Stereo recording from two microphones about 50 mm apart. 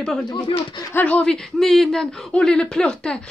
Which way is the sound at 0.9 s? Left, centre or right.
Left.